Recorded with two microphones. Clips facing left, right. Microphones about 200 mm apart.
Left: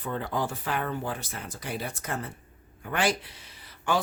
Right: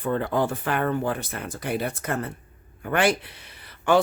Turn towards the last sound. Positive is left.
turn(degrees=-60)  # may be behind; listen again after turning